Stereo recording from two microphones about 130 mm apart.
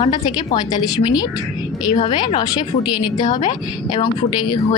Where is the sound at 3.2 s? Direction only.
65° left (ahead or behind).